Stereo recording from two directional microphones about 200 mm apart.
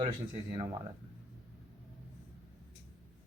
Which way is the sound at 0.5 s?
20° right (ahead or behind).